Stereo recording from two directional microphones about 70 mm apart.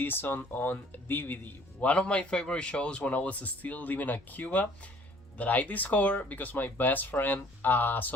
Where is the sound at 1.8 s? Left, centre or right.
Centre.